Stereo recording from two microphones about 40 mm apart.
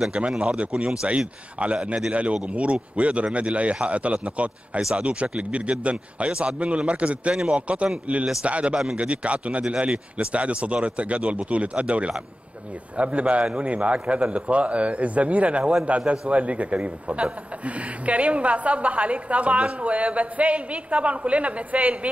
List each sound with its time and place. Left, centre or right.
0.4 s speech: right